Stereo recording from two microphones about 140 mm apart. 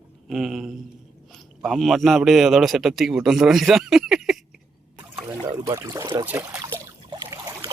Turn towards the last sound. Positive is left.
turn(degrees=-25)  # may be behind; listen again after turning